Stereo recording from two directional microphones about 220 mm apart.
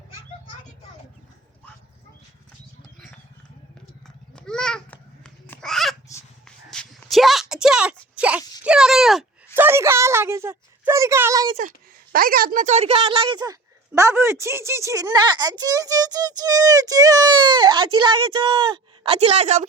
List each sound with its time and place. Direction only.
4.4 s babbling: 5° left (ahead or behind)
6.4 s a sound: 5° left (ahead or behind); by 11.5 s 15° right (ahead or behind)
12.1 s a woman's voice: 40° right (ahead or behind)